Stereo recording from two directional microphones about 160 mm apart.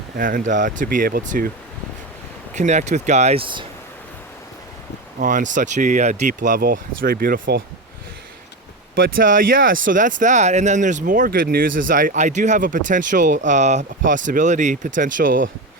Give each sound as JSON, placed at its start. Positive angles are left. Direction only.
{"t": 0.2, "sound": "speech", "side_deg": -60}
{"t": 2.6, "sound": "speech", "side_deg": -45}
{"t": 5.2, "sound": "speech", "side_deg": -55}
{"t": 9.0, "sound": "speech", "side_deg": -60}